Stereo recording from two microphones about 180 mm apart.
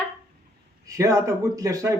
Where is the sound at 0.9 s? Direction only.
15° right (ahead or behind).